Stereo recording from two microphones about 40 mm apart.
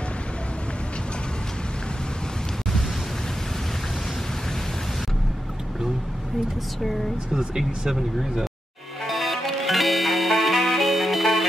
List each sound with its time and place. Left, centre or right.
7.3 s speech: centre
9.0 s music: centre